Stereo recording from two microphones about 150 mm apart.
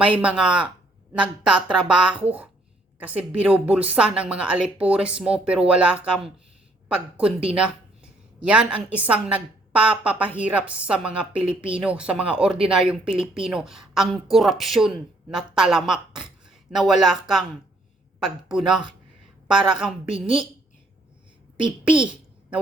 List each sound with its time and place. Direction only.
0.0 s a woman's voice: 10° right (ahead or behind)
18.2 s a woman's voice: 5° right (ahead or behind)
20.1 s a woman's voice: 35° right (ahead or behind)